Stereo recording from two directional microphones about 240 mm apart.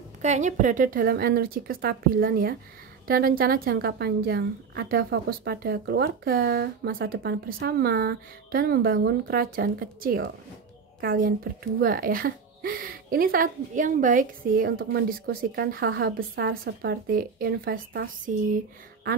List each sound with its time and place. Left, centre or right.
0.2 s speech: right